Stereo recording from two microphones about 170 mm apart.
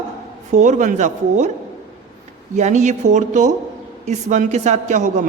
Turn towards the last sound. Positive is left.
turn(degrees=-45)  # may be behind; listen again after turning